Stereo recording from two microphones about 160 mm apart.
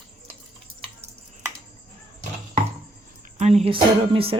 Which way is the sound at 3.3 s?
45° right (ahead or behind).